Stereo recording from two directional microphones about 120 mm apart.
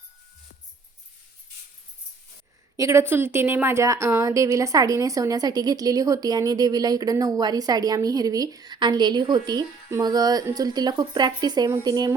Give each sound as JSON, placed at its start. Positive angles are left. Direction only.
{"t": 2.7, "sound": "a woman's voice", "side_deg": -25}